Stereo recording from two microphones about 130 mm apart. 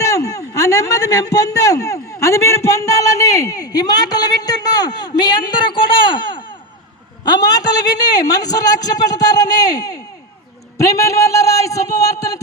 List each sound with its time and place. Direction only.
0.0 s a man's voice: 25° left (ahead or behind)